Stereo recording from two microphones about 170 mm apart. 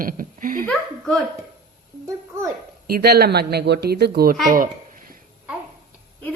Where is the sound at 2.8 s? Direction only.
65° right (ahead or behind).